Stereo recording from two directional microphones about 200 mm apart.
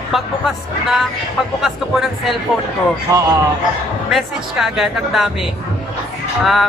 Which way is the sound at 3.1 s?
15° right (ahead or behind).